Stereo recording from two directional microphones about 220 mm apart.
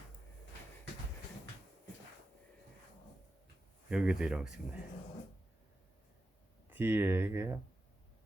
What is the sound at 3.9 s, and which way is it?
Speech, 5° right (ahead or behind).